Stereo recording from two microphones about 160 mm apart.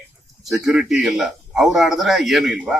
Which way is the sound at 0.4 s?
Centre (ahead or behind).